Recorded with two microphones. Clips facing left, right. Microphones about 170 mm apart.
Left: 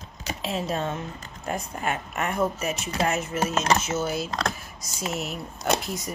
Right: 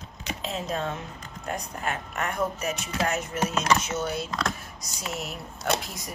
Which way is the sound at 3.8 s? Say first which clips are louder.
Left 2 dB; 5° left (ahead or behind).